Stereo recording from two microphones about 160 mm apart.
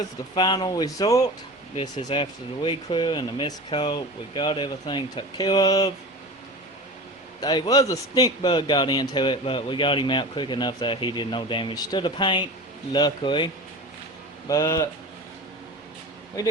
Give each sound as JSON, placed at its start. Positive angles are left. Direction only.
{"t": 0.3, "sound": "a man's voice", "side_deg": 30}
{"t": 7.4, "sound": "a man's voice", "side_deg": 25}
{"t": 14.4, "sound": "a man's voice", "side_deg": 20}